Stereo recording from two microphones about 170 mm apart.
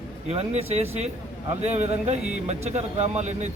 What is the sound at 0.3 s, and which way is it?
Speech, 35° right (ahead or behind).